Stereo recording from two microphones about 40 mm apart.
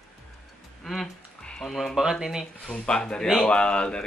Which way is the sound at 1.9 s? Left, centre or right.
Centre.